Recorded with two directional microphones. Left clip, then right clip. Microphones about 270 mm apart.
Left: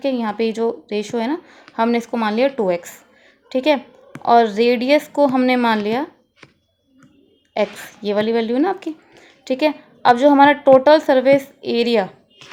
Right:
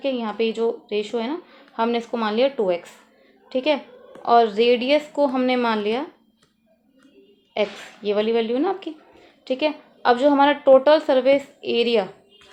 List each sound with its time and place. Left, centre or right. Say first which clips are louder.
0.0 s speech: left 3 dB; left
7.5 s speech: left 3 dB; left